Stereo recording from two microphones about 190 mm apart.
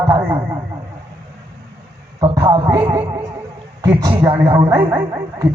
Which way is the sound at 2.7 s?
10° right (ahead or behind).